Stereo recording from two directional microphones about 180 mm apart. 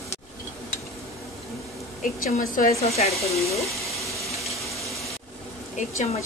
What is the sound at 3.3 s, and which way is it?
Speech, 15° left (ahead or behind).